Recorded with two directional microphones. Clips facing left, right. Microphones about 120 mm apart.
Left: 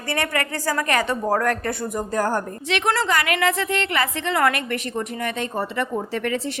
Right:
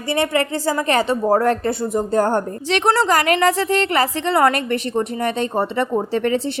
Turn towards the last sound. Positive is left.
turn(degrees=-30)  # may be behind; listen again after turning